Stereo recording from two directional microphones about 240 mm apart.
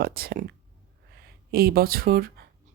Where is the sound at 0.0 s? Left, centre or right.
Right.